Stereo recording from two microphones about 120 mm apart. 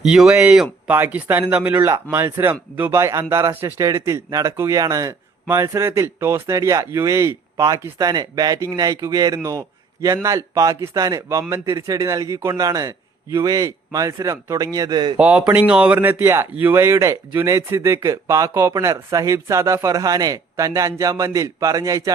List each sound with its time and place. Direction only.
0.0 s speech: 5° right (ahead or behind)
1.9 s speech: 30° right (ahead or behind)
2.4 s speech: 15° right (ahead or behind); by 15.2 s 40° right (ahead or behind)
15.2 s speech: 10° right (ahead or behind); by 22.1 s 30° right (ahead or behind)